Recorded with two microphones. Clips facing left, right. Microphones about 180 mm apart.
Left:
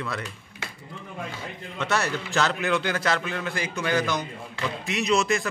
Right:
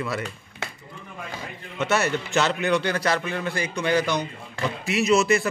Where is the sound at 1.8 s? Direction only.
5° right (ahead or behind).